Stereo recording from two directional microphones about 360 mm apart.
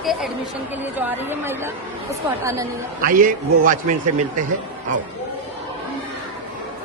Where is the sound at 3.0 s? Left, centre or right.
Right.